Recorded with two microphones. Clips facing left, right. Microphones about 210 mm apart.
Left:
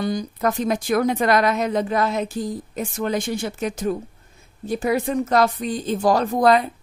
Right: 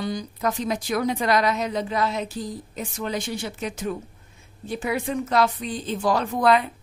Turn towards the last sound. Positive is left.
turn(degrees=40)  # may be behind; listen again after turning